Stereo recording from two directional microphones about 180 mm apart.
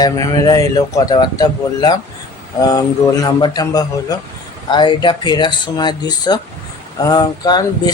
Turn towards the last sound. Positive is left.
turn(degrees=20)  # may be behind; listen again after turning